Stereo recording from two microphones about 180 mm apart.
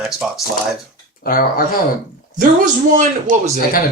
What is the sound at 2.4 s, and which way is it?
Speech, 45° right (ahead or behind).